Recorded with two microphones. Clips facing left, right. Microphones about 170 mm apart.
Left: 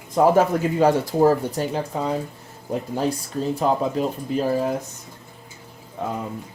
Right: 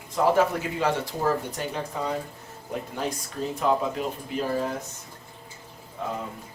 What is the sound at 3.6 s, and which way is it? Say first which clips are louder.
Speech: left 2 dB; 35° left (ahead or behind).